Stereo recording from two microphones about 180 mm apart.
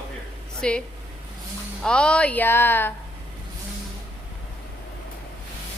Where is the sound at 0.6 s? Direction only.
5° left (ahead or behind).